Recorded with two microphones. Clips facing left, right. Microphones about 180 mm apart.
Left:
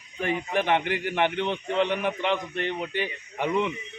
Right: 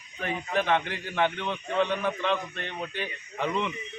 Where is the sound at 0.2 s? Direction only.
15° left (ahead or behind).